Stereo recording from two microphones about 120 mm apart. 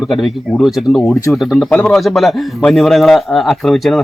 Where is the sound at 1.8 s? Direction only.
Centre (ahead or behind).